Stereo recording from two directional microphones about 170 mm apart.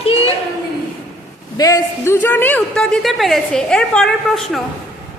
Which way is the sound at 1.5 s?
20° left (ahead or behind).